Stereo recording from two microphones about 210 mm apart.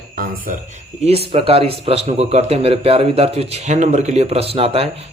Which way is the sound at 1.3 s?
30° right (ahead or behind).